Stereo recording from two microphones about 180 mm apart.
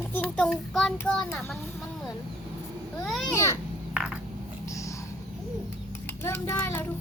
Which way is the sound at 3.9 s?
5° right (ahead or behind).